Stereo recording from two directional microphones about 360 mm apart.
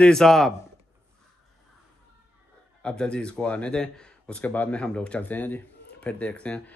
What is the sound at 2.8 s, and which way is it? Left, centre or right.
Speech, centre.